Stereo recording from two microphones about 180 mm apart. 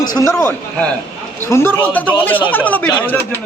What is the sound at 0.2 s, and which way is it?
A man's voice, 15° left (ahead or behind).